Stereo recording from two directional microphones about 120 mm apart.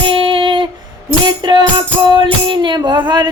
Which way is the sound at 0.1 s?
45° right (ahead or behind).